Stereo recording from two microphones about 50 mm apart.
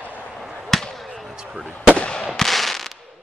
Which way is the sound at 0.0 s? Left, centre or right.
Left.